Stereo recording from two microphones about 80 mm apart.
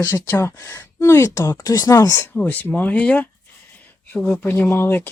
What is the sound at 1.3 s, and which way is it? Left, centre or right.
Speech, left.